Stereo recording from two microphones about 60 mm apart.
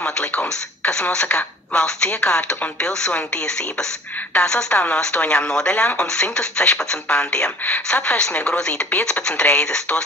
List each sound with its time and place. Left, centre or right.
0.0 s radio: left
1.1 s speech: left
4.7 s speech: left
7.6 s speech: left